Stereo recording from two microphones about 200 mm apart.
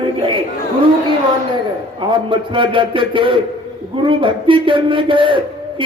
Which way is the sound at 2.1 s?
25° right (ahead or behind).